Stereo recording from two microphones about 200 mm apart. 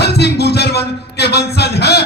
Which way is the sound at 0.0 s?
55° left (ahead or behind).